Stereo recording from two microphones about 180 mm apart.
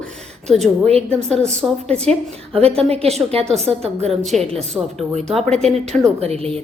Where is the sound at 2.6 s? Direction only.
35° right (ahead or behind).